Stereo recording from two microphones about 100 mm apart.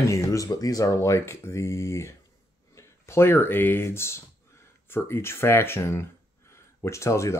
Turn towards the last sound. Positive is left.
turn(degrees=30)  # may be behind; listen again after turning